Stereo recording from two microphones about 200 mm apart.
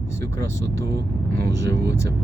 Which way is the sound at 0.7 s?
55° right (ahead or behind).